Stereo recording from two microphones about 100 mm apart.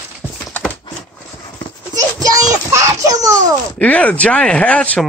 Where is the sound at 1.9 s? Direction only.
35° right (ahead or behind).